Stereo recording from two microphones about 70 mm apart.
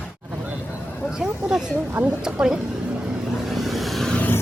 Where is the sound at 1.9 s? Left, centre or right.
Right.